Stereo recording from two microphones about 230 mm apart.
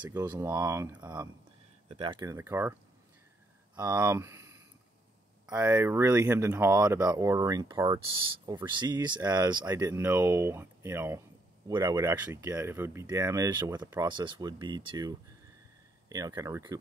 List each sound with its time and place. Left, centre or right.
0.0 s speech: centre
3.7 s speech: centre